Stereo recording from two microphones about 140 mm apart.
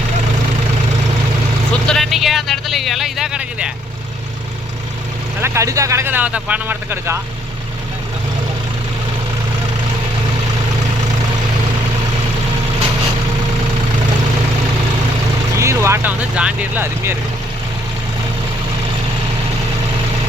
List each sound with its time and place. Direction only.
1.9 s speech: centre (ahead or behind)
5.4 s speech: 20° right (ahead or behind)
15.5 s vehicle: 20° right (ahead or behind)
16.3 s speech: 10° right (ahead or behind)